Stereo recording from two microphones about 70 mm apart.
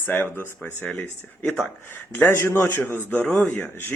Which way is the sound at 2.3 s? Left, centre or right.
Left.